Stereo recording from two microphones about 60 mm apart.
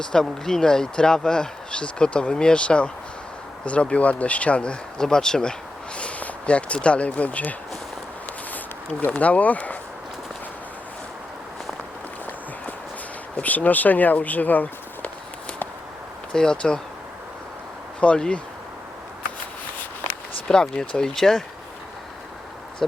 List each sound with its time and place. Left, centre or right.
0.0 s speech: centre
6.0 s a sound: left
6.7 s speech: centre
8.5 s speech: left
13.3 s speech: left
16.3 s speech: centre
18.0 s speech: centre
20.5 s speech: centre
22.8 s speech: centre